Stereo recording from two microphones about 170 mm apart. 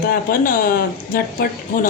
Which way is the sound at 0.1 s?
55° left (ahead or behind).